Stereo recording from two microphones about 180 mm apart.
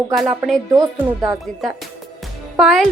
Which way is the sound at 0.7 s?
20° right (ahead or behind).